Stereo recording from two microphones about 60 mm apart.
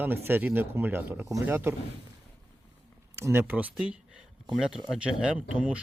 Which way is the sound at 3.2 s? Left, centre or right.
Right.